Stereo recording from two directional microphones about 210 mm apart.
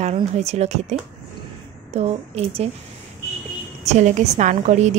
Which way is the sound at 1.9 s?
30° right (ahead or behind).